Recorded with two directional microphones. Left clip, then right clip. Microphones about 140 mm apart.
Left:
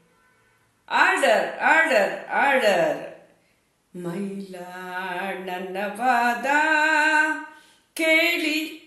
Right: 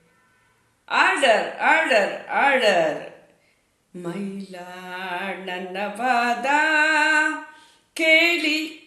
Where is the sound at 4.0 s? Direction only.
15° right (ahead or behind).